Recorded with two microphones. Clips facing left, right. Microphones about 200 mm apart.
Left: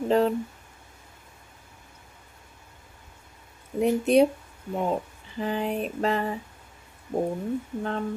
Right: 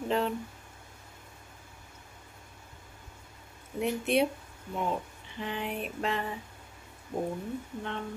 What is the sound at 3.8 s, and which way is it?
A woman's voice, 40° left (ahead or behind).